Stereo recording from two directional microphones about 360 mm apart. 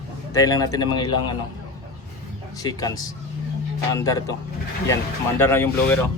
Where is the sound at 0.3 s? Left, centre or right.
Centre.